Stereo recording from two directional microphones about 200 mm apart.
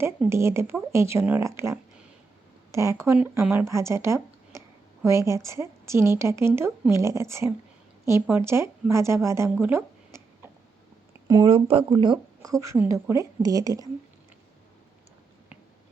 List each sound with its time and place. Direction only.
0.0 s a woman's voice: 15° right (ahead or behind)
11.3 s speech: 25° right (ahead or behind)